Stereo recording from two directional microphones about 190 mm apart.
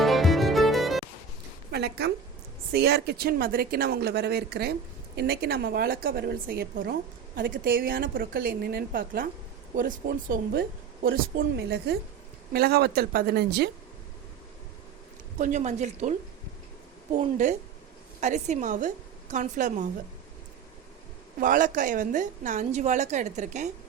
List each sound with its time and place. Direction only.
0.0 s music: centre (ahead or behind)
1.7 s a sound: 60° right (ahead or behind)
2.7 s speech: 60° right (ahead or behind)
15.4 s a woman's voice: 40° right (ahead or behind)
17.2 s a woman's voice: 40° right (ahead or behind)
21.3 s a woman's voice: 45° right (ahead or behind)